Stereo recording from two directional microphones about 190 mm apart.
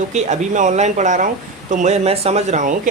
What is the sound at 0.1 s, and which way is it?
Speech, 40° right (ahead or behind).